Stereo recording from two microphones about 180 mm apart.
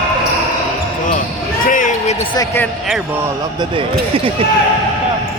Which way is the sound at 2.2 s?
25° left (ahead or behind).